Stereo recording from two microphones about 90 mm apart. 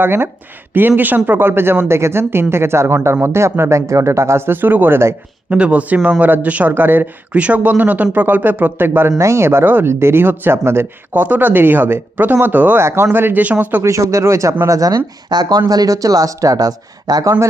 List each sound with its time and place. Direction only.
0.0 s speech: 25° right (ahead or behind)
5.5 s speech: 15° right (ahead or behind)
13.8 s speech: 35° right (ahead or behind)